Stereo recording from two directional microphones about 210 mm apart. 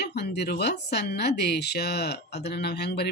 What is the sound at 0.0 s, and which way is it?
A woman's voice, 50° left (ahead or behind).